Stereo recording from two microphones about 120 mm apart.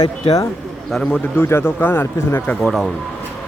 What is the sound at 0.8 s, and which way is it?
Speech, 5° left (ahead or behind).